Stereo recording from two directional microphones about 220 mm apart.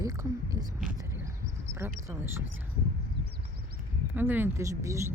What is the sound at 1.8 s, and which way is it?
Speech, 10° right (ahead or behind).